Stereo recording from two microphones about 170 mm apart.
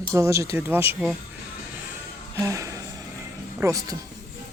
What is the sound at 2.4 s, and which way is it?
Music, 20° right (ahead or behind).